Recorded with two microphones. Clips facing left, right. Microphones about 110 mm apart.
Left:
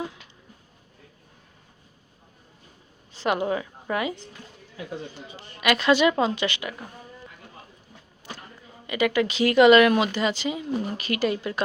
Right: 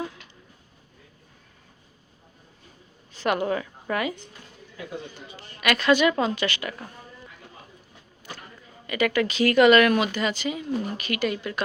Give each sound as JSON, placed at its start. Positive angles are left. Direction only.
{"t": 3.2, "sound": "a woman's voice", "side_deg": 20}
{"t": 5.1, "sound": "speech", "side_deg": 20}
{"t": 8.9, "sound": "speech", "side_deg": 20}